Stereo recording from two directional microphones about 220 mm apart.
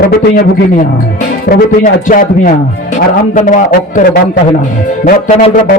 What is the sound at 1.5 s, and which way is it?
Speech, 40° left (ahead or behind).